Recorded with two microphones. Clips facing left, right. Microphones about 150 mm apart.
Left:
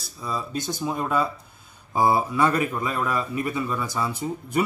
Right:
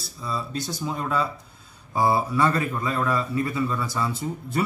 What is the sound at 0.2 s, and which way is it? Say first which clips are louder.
Speech: left 1 dB; 15° left (ahead or behind).